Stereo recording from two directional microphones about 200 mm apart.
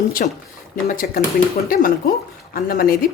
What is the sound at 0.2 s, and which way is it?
Speech, 45° left (ahead or behind).